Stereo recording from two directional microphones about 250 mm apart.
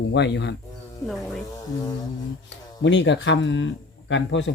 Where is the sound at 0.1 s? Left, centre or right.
Left.